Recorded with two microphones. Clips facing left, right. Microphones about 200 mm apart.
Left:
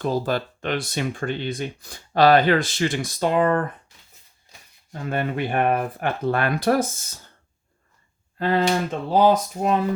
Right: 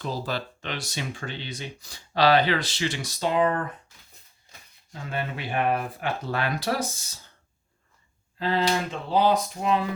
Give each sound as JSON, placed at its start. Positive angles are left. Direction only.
{"t": 0.0, "sound": "speech", "side_deg": 50}
{"t": 4.9, "sound": "speech", "side_deg": 55}
{"t": 8.4, "sound": "speech", "side_deg": 50}